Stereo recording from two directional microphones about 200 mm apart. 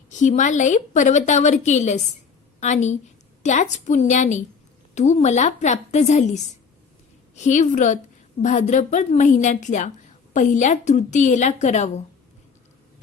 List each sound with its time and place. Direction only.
0.1 s a woman's voice: 40° left (ahead or behind)